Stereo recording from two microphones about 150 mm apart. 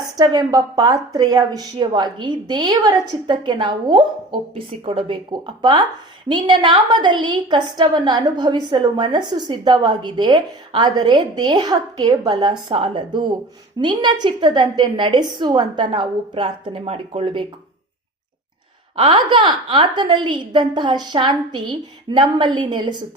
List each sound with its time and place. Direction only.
0.2 s a woman's voice: 25° right (ahead or behind)
18.9 s a woman's voice: 35° right (ahead or behind)